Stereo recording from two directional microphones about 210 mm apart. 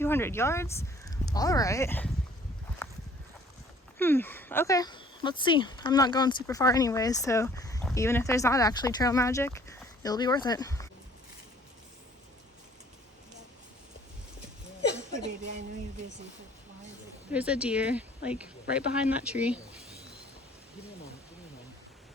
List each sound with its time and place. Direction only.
0.0 s speech: 10° left (ahead or behind)
3.9 s speech: 10° left (ahead or behind)
14.9 s a woman's voice: 60° right (ahead or behind)
17.3 s speech: 5° right (ahead or behind)